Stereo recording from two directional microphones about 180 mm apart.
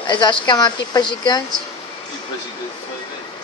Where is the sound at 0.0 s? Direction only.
25° left (ahead or behind).